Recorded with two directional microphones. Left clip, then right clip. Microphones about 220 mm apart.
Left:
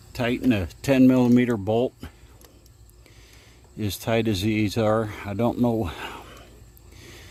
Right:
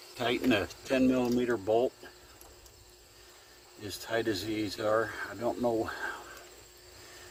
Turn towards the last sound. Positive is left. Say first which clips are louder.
# left 4 dB
turn(degrees=35)  # may be behind; listen again after turning